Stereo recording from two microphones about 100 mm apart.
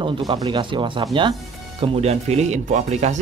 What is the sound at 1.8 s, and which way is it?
Speech, 90° right.